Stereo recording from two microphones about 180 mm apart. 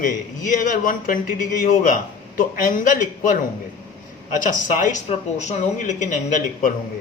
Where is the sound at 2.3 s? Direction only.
50° left (ahead or behind).